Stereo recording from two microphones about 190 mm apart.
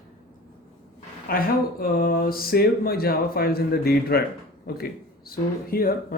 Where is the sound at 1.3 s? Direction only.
50° left (ahead or behind).